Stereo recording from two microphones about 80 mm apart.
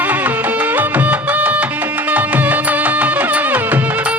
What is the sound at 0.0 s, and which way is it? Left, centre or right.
Music, centre.